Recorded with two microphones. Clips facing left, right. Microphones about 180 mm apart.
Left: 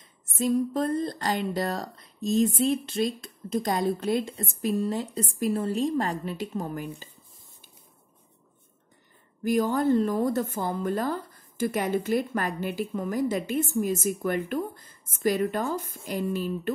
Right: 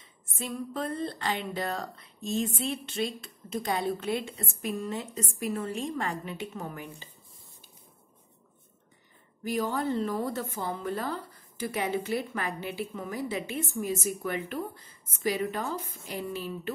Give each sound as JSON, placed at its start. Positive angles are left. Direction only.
{"t": 0.4, "sound": "speech", "side_deg": 40}
{"t": 9.5, "sound": "speech", "side_deg": 45}